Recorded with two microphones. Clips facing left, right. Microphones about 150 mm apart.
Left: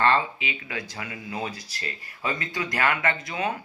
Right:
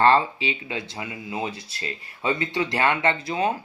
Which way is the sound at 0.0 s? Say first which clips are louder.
Right 4 dB; 30° right (ahead or behind).